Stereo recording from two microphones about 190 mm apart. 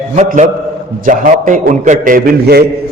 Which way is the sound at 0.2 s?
40° right (ahead or behind).